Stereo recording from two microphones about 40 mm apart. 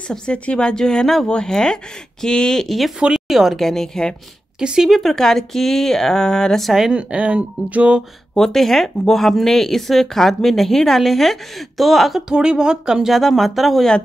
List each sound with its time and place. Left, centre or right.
0.3 s speech: left
3.1 s speech: centre
3.5 s speech: centre
4.6 s speech: centre
5.0 s speech: centre
6.6 s speech: centre
6.9 s speech: right
8.4 s a woman's voice: centre
12.3 s speech: centre
13.1 s a woman's voice: centre